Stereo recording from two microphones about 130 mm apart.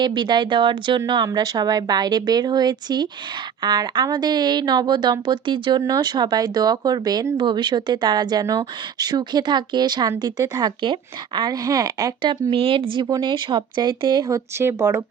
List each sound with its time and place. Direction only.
0.0 s speech: 35° right (ahead or behind)
12.5 s speech: 45° right (ahead or behind); by 15.0 s 20° right (ahead or behind)